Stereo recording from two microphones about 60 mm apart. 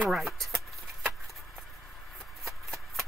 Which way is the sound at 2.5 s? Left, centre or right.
Centre.